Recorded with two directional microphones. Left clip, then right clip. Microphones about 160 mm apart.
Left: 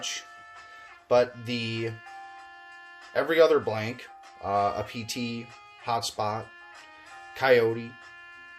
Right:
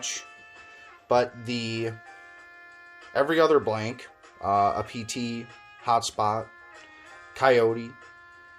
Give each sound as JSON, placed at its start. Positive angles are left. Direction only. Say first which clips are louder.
{"t": 1.0, "sound": "speech", "louder": "even", "side_deg": -30}
{"t": 3.1, "sound": "speech", "louder": "even", "side_deg": -30}